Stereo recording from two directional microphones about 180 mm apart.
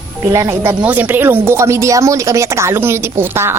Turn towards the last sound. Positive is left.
turn(degrees=-15)  # may be behind; listen again after turning